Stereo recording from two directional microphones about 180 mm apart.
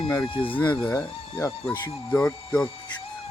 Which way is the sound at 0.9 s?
15° left (ahead or behind).